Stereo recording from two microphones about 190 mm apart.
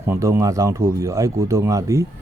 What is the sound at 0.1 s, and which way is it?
Speech, 15° right (ahead or behind).